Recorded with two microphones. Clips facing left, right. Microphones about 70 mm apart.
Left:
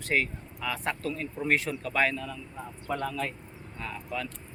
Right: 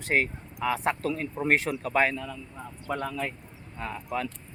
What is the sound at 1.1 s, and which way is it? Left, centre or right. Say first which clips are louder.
Speech: right 2 dB; right.